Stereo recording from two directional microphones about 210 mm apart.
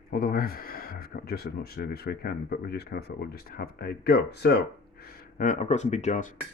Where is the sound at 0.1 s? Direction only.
45° left (ahead or behind).